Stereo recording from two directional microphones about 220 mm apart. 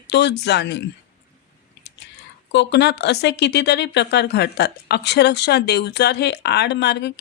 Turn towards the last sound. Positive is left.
turn(degrees=50)  # may be behind; listen again after turning